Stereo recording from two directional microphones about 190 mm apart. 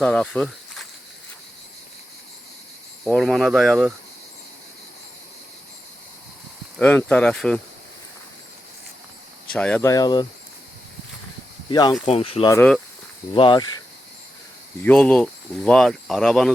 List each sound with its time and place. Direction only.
0.0 s speech: 5° left (ahead or behind)
3.0 s speech: centre (ahead or behind)
6.7 s speech: 10° left (ahead or behind)
9.5 s speech: 5° left (ahead or behind)
9.9 s speech: 20° left (ahead or behind)
11.7 s speech: 20° left (ahead or behind)
12.5 s speech: 10° left (ahead or behind)
13.3 s speech: 25° left (ahead or behind)
14.8 s speech: 5° left (ahead or behind)